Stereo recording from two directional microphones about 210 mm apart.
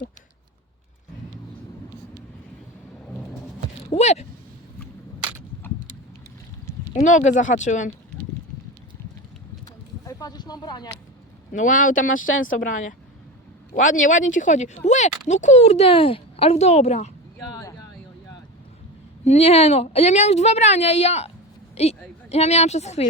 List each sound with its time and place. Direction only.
3.9 s speech: 30° left (ahead or behind)
7.0 s speech: 35° left (ahead or behind)
10.1 s a sound: 15° left (ahead or behind)
11.5 s speech: 35° left (ahead or behind)
12.1 s a woman's voice: 70° left (ahead or behind)
12.5 s speech: 40° left (ahead or behind)
19.2 s speech: 30° left (ahead or behind)